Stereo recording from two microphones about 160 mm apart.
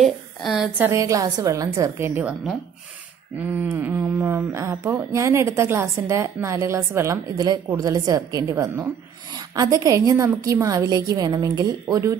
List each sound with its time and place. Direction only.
0.0 s a woman's voice: centre (ahead or behind)
0.8 s a woman's voice: 20° right (ahead or behind)